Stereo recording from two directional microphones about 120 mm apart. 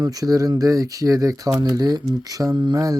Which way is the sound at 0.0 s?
30° right (ahead or behind).